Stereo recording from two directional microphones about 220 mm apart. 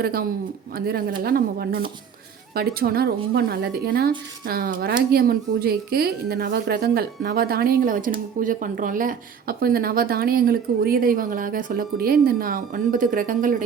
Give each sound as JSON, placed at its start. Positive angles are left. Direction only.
{"t": 0.0, "sound": "a woman's voice", "side_deg": -45}